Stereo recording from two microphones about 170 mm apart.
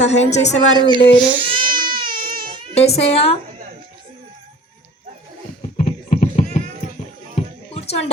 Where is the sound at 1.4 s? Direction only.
30° right (ahead or behind).